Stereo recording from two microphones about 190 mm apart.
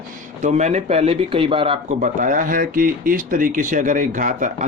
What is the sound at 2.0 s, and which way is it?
Speech, 45° right (ahead or behind).